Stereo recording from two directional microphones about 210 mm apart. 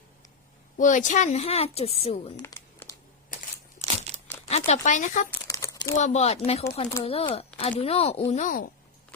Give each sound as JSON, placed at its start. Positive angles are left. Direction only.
{"t": 0.8, "sound": "speech", "side_deg": 35}
{"t": 2.4, "sound": "crumpling", "side_deg": 10}
{"t": 3.8, "sound": "crumpling", "side_deg": -15}
{"t": 4.4, "sound": "speech", "side_deg": 30}
{"t": 5.5, "sound": "a sound", "side_deg": 15}
{"t": 6.0, "sound": "speech", "side_deg": 30}